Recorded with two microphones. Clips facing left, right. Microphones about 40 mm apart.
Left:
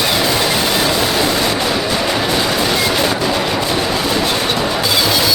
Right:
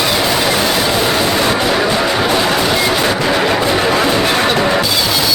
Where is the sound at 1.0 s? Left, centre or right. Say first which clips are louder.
Right 2 dB; centre.